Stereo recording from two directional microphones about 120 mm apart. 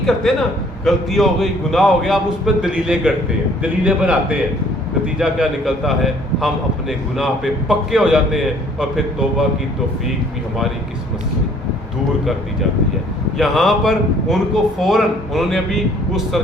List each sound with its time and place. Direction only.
0.0 s a man's voice: centre (ahead or behind)
5.2 s a man's voice: 5° right (ahead or behind)
13.4 s a man's voice: centre (ahead or behind)